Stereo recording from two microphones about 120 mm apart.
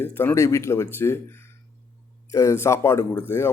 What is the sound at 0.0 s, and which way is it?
Speech, 20° left (ahead or behind).